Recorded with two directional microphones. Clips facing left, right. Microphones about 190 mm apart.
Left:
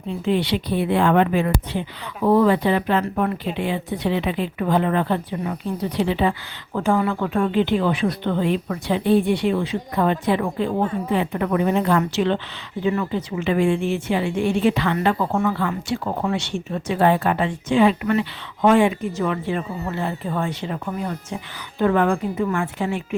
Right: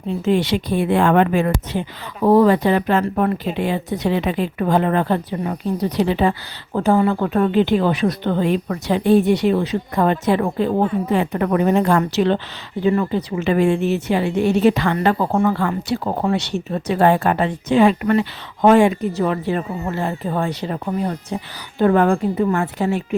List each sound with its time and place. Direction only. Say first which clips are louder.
0.3 s speech: right 3 dB; 45° right (ahead or behind)